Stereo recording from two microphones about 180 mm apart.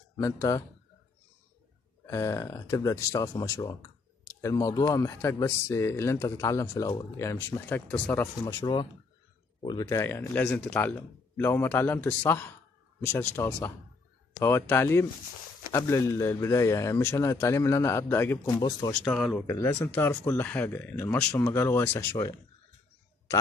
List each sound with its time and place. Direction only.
0.2 s speech: 15° left (ahead or behind)
2.0 s speech: 15° left (ahead or behind)
9.6 s speech: 25° left (ahead or behind)
18.9 s speech: 5° left (ahead or behind)
19.4 s speech: 15° left (ahead or behind)